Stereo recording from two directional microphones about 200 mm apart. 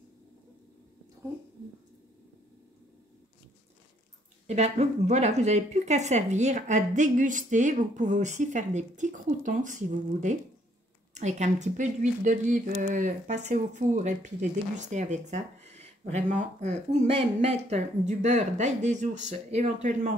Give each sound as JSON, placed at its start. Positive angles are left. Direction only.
{"t": 4.5, "sound": "speech", "side_deg": -35}